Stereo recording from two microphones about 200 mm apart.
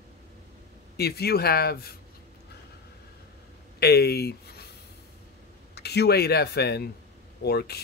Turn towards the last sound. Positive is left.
turn(degrees=55)  # may be behind; listen again after turning